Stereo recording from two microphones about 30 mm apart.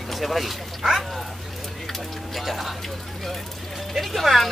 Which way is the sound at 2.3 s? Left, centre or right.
Centre.